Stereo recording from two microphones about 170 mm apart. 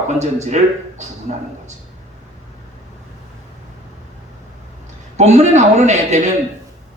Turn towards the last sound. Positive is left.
turn(degrees=-45)  # may be behind; listen again after turning